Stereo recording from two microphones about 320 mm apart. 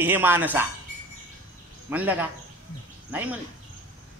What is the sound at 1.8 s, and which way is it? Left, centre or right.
A man's voice, centre.